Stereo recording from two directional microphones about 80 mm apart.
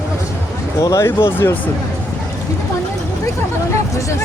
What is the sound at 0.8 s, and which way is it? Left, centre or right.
Speech, left.